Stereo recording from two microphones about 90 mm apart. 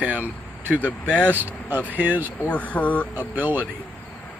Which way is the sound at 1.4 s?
20° right (ahead or behind).